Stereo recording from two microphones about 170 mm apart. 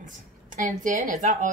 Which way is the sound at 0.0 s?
50° right (ahead or behind).